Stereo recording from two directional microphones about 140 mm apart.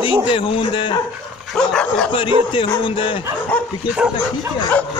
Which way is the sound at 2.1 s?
35° left (ahead or behind).